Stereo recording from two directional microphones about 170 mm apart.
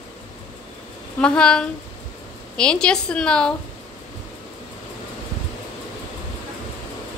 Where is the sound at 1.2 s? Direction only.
5° left (ahead or behind).